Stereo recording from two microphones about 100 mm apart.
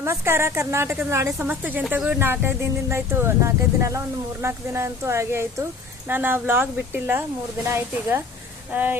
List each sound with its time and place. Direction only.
0.0 s speech: 25° right (ahead or behind)